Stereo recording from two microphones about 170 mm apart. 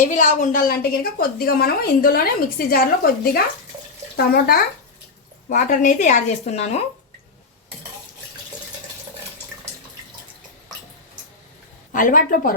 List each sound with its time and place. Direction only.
0.1 s a woman's voice: 45° left (ahead or behind)
5.5 s speech: 50° left (ahead or behind)
11.9 s speech: 50° left (ahead or behind)